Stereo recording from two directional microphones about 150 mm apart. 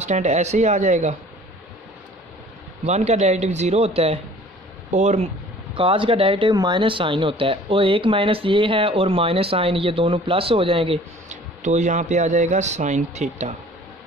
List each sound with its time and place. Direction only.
0.0 s speech: 50° right (ahead or behind)
2.8 s speech: 50° right (ahead or behind)
5.8 s speech: 35° right (ahead or behind)
11.6 s speech: 55° right (ahead or behind)